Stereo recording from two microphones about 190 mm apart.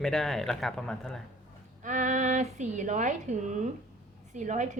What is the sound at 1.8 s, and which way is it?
Speech, 40° right (ahead or behind).